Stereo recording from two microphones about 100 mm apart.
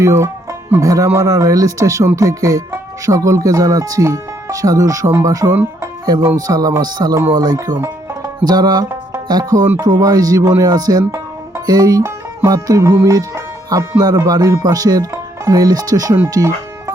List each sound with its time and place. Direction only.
0.0 s speech: 30° right (ahead or behind)
8.4 s music: 40° right (ahead or behind)
9.2 s speech: 40° right (ahead or behind)
16.3 s music: 35° right (ahead or behind)